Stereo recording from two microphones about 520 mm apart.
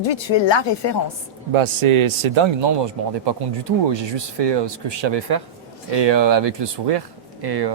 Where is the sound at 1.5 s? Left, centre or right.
Right.